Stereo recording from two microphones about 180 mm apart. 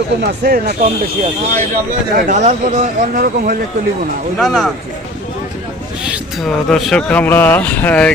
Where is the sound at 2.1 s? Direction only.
45° right (ahead or behind).